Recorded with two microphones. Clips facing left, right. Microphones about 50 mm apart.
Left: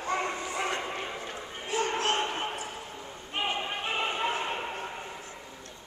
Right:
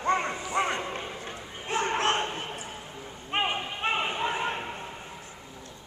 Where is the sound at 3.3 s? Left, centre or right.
Right.